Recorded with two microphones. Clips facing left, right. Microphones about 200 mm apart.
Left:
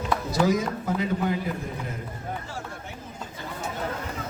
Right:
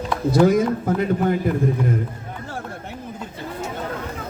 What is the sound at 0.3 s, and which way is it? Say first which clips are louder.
A man's voice: right 9 dB; 55° right (ahead or behind).